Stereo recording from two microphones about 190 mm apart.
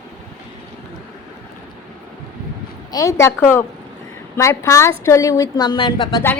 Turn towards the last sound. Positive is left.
turn(degrees=25)  # may be behind; listen again after turning